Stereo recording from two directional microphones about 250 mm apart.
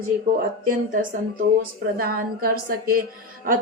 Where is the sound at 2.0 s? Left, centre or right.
Right.